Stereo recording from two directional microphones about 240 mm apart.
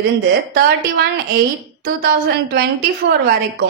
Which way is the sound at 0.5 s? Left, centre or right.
Right.